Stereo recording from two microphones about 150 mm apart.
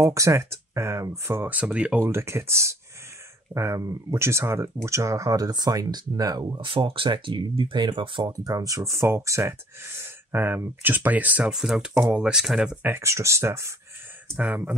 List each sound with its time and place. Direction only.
0.0 s speech: 20° right (ahead or behind)